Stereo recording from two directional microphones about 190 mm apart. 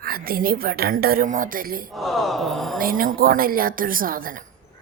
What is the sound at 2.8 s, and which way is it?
A woman's voice, 50° right (ahead or behind).